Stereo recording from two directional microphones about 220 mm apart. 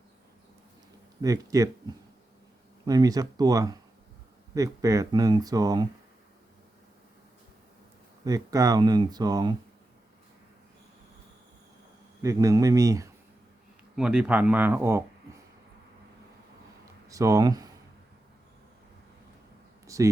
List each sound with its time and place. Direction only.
1.2 s speech: 15° right (ahead or behind)
2.8 s speech: 15° right (ahead or behind)
8.2 s speech: 15° right (ahead or behind)
12.2 s speech: 15° right (ahead or behind)
13.9 s speech: 5° right (ahead or behind)
17.1 s speech: 15° right (ahead or behind)
19.9 s a sound: 15° right (ahead or behind)